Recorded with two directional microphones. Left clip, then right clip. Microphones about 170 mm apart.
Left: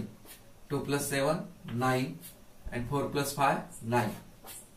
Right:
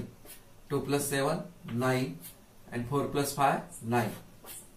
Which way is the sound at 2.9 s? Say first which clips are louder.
Right 1 dB; 20° left (ahead or behind).